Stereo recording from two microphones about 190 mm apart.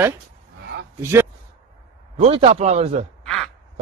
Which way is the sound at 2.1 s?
35° right (ahead or behind).